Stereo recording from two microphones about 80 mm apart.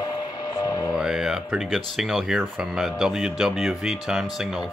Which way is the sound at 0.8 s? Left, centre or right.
Centre.